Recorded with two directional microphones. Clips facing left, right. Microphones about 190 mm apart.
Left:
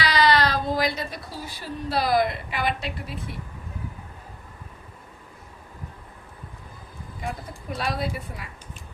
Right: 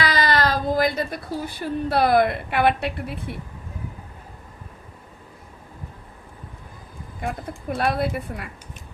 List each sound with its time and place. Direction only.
0.0 s speech: 50° right (ahead or behind)
7.2 s a woman's voice: 55° right (ahead or behind)